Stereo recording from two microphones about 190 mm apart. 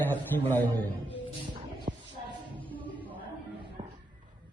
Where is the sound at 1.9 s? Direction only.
40° right (ahead or behind).